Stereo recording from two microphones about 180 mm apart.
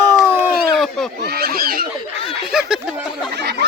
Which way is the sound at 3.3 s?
70° right (ahead or behind).